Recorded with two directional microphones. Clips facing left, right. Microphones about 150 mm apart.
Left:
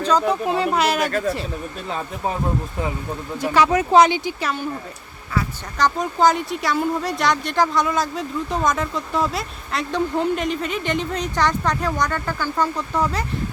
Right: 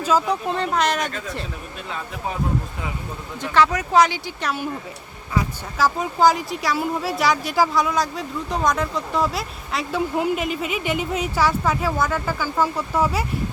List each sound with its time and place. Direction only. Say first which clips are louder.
0.0 s a woman's voice: left 1 dB; 5° right (ahead or behind)
3.4 s speech: left 1 dB; 10° left (ahead or behind)
3.7 s speech: left 4 dB; 25° left (ahead or behind)
5.7 s a woman's voice: left 1 dB; 5° right (ahead or behind)